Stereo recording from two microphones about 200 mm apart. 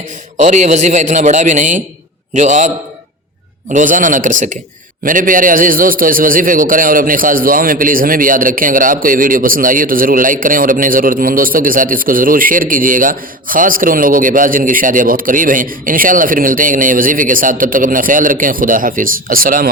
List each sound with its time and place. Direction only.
0.3 s a man's voice: 35° right (ahead or behind)